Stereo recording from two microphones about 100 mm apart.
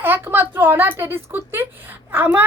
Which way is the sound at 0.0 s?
20° right (ahead or behind).